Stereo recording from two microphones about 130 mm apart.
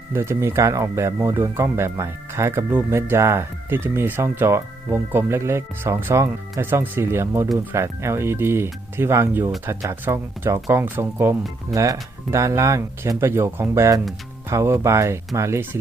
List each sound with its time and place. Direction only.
0.1 s speech: 20° right (ahead or behind)